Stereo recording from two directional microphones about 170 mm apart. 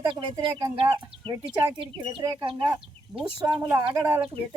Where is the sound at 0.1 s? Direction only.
30° right (ahead or behind).